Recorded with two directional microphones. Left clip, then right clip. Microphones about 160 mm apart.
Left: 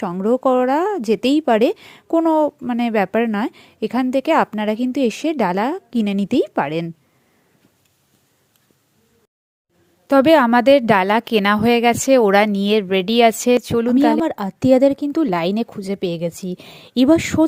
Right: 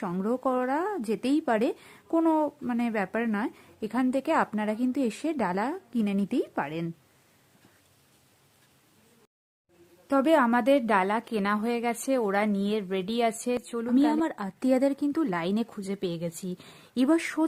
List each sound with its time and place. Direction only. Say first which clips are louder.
0.2 s a woman's voice: left 12 dB; 30° left (ahead or behind)
10.1 s a woman's voice: left 10 dB; 40° left (ahead or behind)